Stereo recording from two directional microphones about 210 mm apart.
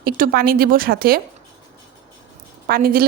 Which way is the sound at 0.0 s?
45° right (ahead or behind).